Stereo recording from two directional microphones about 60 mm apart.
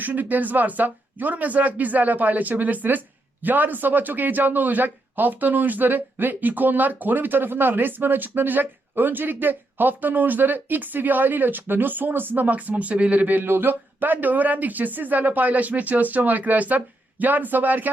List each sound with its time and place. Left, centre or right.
0.0 s a man's voice: right